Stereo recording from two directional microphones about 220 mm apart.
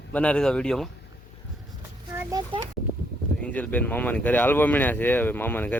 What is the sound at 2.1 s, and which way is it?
Speech, 15° right (ahead or behind).